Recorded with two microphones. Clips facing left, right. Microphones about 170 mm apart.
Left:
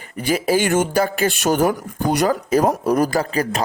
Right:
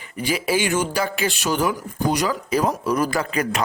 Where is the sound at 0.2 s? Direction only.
45° left (ahead or behind).